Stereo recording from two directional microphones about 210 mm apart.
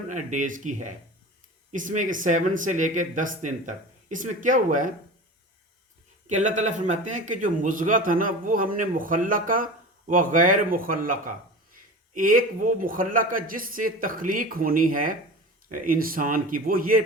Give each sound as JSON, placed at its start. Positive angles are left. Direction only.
{"t": 0.1, "sound": "a man's voice", "side_deg": -35}
{"t": 6.2, "sound": "a man's voice", "side_deg": -35}